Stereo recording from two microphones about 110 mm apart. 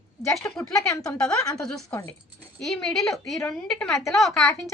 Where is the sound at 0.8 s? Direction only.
30° left (ahead or behind).